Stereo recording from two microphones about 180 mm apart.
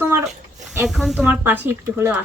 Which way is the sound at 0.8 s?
Centre (ahead or behind).